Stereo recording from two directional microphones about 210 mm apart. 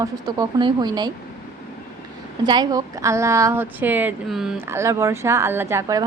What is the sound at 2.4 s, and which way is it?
Speech, 20° right (ahead or behind).